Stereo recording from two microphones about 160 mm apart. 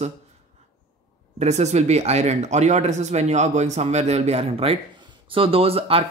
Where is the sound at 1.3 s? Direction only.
45° right (ahead or behind).